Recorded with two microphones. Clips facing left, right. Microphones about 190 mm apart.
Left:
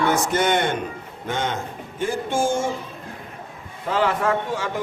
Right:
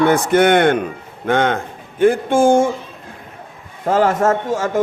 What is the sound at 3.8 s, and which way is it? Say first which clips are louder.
Speech: right 6 dB; 45° right (ahead or behind).